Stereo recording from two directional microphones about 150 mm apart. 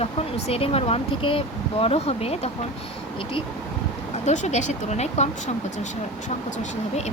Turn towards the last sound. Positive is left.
turn(degrees=50)  # may be behind; listen again after turning